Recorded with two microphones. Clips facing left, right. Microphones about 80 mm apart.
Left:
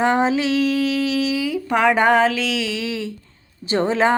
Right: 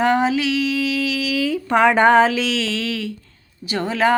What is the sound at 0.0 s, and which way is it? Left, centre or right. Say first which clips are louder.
Music: even; left.